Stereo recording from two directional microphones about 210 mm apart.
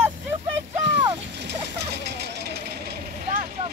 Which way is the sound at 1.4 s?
50° right (ahead or behind).